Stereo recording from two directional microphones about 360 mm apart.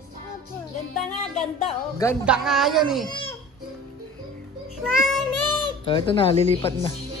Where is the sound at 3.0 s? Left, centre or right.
Centre.